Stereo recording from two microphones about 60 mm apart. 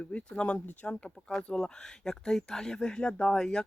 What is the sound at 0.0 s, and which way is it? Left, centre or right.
Speech, left.